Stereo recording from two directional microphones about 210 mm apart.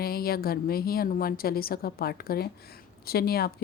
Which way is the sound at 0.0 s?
45° left (ahead or behind).